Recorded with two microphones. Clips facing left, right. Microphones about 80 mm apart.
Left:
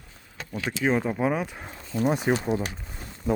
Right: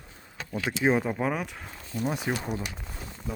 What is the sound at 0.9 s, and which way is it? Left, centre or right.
Speech, centre.